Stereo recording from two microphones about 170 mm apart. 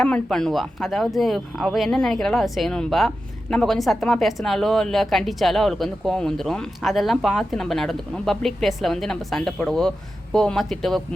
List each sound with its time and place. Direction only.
0.0 s a woman's voice: 5° left (ahead or behind)